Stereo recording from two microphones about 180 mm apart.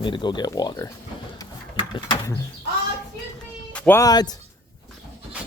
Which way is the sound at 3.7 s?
10° left (ahead or behind).